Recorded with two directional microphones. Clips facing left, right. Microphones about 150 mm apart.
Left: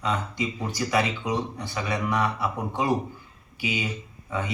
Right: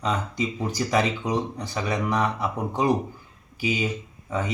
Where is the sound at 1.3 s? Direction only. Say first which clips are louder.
Right 2 dB; 40° right (ahead or behind).